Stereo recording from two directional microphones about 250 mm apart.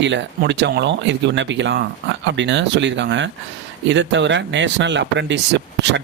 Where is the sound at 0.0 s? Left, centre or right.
Right.